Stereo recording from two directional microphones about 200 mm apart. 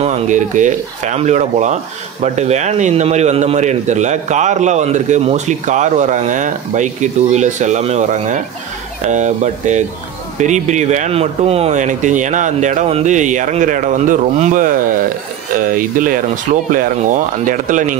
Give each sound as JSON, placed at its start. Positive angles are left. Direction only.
{"t": 0.0, "sound": "speech", "side_deg": -35}